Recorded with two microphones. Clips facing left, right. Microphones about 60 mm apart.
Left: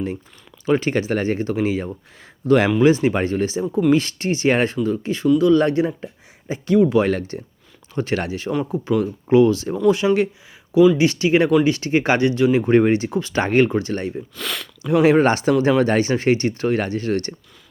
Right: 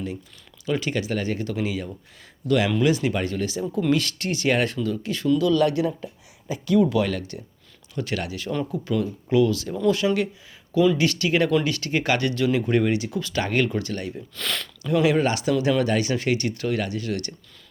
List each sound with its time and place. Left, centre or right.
0.6 s speech: left
14.3 s a sound: centre
14.8 s speech: left
15.0 s speech: left